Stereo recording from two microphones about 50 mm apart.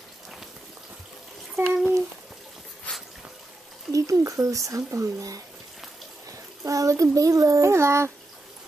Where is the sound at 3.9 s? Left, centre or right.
Right.